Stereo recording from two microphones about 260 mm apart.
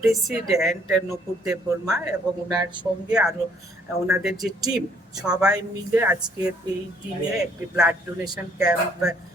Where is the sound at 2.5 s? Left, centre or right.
Centre.